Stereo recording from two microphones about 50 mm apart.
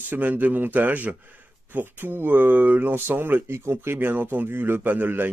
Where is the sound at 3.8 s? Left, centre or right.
Right.